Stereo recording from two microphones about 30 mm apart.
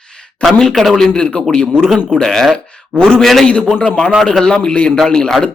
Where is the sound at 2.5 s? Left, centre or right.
Left.